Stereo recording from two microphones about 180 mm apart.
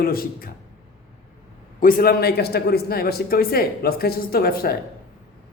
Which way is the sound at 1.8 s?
55° left (ahead or behind).